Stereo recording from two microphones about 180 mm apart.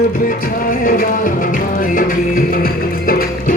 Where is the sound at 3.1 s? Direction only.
55° left (ahead or behind).